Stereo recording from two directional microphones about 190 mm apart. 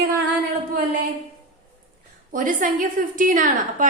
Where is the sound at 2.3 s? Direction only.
45° right (ahead or behind).